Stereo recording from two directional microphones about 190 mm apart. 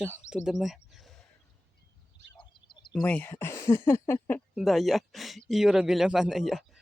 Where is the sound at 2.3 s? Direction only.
25° left (ahead or behind).